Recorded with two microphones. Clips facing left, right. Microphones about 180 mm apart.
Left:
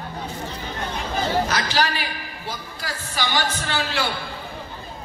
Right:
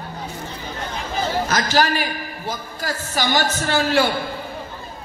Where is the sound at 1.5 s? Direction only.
45° right (ahead or behind).